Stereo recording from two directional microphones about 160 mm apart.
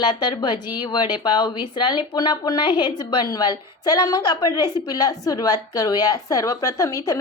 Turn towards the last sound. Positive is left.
turn(degrees=20)  # may be behind; listen again after turning